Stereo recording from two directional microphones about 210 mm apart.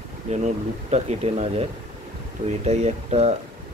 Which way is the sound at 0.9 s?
30° right (ahead or behind).